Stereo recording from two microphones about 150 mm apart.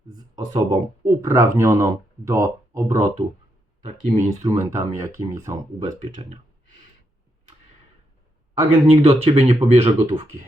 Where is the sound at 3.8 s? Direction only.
45° right (ahead or behind).